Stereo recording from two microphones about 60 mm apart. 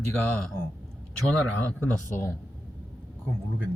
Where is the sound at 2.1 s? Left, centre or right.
Left.